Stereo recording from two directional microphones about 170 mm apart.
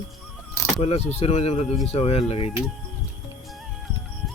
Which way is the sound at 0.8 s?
35° left (ahead or behind).